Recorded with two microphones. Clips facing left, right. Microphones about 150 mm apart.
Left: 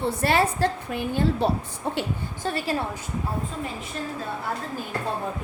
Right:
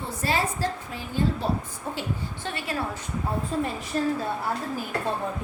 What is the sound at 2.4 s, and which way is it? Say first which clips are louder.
Speech: left 7 dB; 35° left (ahead or behind).